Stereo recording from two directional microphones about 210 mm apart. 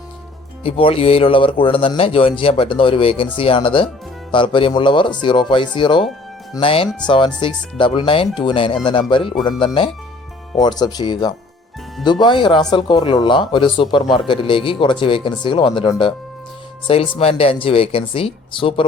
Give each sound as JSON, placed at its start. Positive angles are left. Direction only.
{"t": 0.6, "sound": "speech", "side_deg": 25}